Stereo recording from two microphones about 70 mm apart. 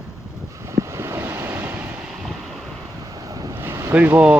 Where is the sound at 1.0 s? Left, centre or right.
Right.